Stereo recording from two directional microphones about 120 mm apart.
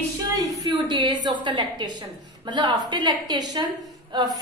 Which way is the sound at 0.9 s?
40° right (ahead or behind).